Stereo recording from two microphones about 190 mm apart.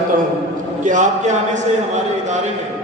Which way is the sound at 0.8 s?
40° right (ahead or behind).